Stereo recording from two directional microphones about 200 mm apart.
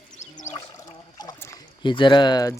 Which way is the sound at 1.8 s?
25° left (ahead or behind).